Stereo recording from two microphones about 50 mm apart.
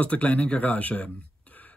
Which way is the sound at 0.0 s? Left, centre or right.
Left.